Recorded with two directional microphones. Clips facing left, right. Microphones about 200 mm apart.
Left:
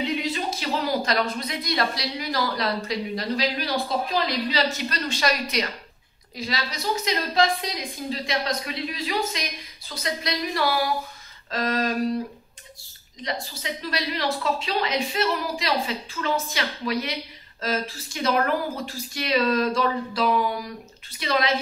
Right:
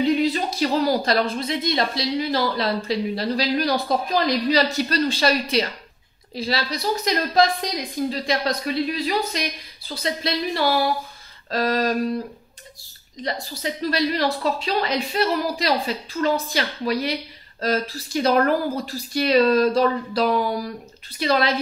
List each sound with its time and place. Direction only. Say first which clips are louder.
0.0 s speech: right 7 dB; 40° right (ahead or behind)
11.5 s speech: right 4 dB; 40° right (ahead or behind)
13.2 s speech: right 4 dB; 40° right (ahead or behind)